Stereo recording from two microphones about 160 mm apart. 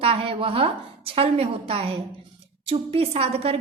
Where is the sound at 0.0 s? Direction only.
35° right (ahead or behind).